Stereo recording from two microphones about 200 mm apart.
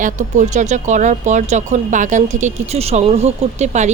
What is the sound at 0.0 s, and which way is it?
Speech, 35° right (ahead or behind).